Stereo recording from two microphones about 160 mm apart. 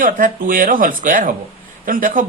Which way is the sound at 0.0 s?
60° right (ahead or behind).